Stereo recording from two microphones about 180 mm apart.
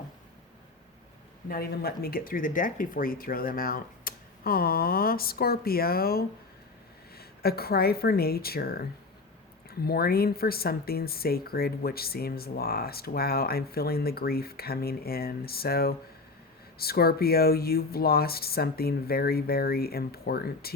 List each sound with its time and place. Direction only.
1.5 s speech: 55° left (ahead or behind)